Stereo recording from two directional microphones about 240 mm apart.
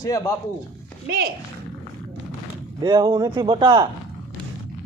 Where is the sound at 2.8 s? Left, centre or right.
Centre.